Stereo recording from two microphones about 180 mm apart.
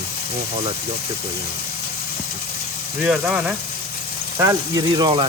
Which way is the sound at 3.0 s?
5° right (ahead or behind).